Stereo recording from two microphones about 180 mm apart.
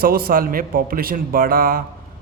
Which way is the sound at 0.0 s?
55° right (ahead or behind).